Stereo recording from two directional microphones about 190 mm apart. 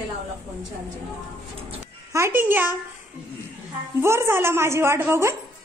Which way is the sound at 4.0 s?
15° right (ahead or behind).